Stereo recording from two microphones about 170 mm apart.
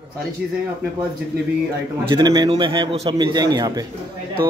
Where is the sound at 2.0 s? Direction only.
25° right (ahead or behind).